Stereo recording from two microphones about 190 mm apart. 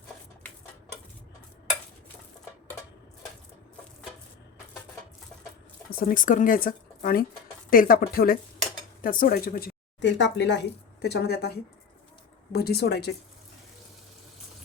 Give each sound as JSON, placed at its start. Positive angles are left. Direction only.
{"t": 5.9, "sound": "speech", "side_deg": 50}
{"t": 12.5, "sound": "speech", "side_deg": 55}